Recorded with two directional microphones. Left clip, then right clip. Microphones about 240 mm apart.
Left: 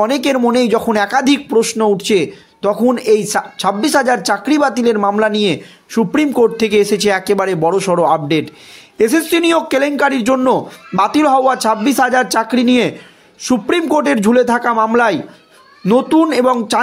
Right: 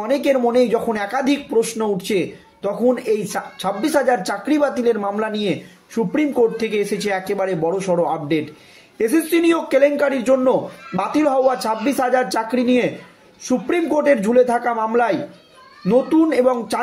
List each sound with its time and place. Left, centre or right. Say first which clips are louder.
0.0 s speech: left 4 dB; left